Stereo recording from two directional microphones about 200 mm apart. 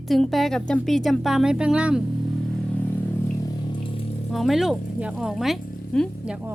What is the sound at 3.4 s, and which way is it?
Water, 20° left (ahead or behind).